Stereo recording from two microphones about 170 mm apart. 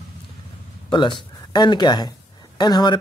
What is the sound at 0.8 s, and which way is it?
A woman's voice, 30° left (ahead or behind).